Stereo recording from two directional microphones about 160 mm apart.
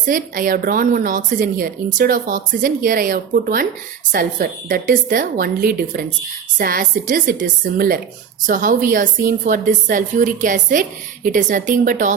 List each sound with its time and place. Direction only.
0.0 s a woman's voice: 60° right (ahead or behind)